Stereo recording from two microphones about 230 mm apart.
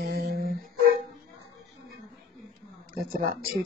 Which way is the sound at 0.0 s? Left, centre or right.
Right.